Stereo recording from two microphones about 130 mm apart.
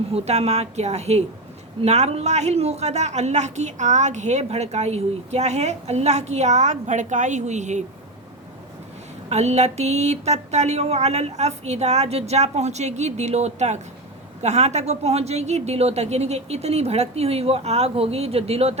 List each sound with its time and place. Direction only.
0.1 s a woman's voice: 55° right (ahead or behind)
9.3 s a woman's voice: 55° right (ahead or behind)